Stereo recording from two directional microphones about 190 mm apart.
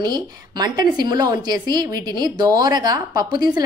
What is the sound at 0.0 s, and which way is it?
A woman's voice, 20° right (ahead or behind).